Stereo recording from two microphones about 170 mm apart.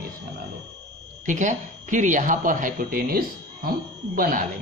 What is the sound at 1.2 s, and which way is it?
Speech, 45° right (ahead or behind).